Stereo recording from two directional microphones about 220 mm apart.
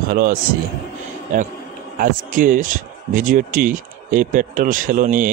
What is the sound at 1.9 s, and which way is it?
Speech, 40° right (ahead or behind).